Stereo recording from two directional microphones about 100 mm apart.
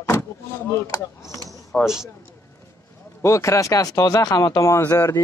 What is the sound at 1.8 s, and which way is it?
Speech, 5° right (ahead or behind).